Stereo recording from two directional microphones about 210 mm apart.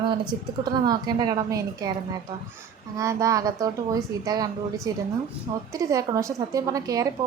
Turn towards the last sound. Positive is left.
turn(degrees=-15)  # may be behind; listen again after turning